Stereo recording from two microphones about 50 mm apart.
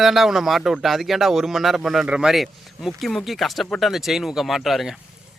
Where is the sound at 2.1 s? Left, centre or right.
Centre.